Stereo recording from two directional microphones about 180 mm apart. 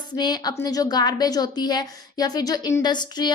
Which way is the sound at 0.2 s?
20° left (ahead or behind).